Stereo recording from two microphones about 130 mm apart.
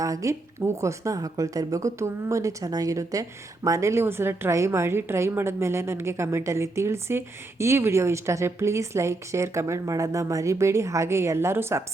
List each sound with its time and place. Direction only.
0.0 s speech: 25° right (ahead or behind)